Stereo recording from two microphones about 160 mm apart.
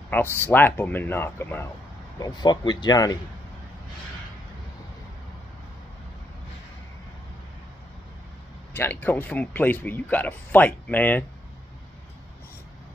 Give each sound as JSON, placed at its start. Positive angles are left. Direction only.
{"t": 0.4, "sound": "speech", "side_deg": 10}
{"t": 2.1, "sound": "speech", "side_deg": 25}
{"t": 8.7, "sound": "speech", "side_deg": 10}